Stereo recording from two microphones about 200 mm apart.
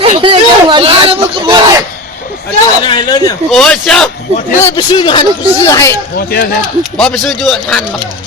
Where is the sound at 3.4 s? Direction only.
Centre (ahead or behind).